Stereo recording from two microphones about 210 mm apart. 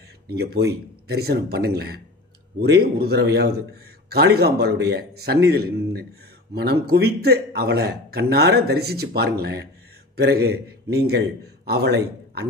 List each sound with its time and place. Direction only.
0.3 s a man's voice: 50° right (ahead or behind)